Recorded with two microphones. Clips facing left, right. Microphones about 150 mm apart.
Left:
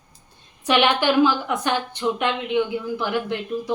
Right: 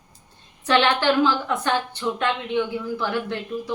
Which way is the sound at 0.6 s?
15° left (ahead or behind).